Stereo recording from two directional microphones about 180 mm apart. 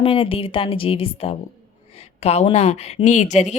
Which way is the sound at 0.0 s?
30° left (ahead or behind).